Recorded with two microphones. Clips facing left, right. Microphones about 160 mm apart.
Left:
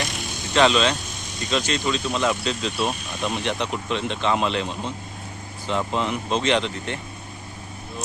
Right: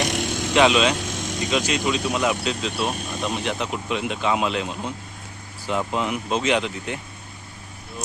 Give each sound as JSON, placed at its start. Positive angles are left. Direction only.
{"t": 0.1, "sound": "vehicle", "side_deg": -90}
{"t": 0.5, "sound": "speech", "side_deg": -10}